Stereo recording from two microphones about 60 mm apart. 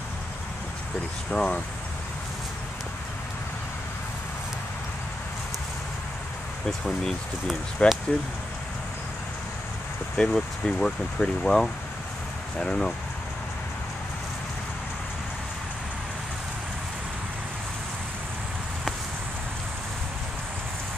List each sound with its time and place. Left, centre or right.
1.3 s speech: centre
7.8 s speech: left
10.1 s speech: centre